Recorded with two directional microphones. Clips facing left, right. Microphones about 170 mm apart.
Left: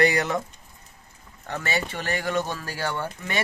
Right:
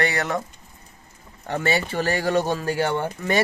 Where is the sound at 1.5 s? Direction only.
30° right (ahead or behind).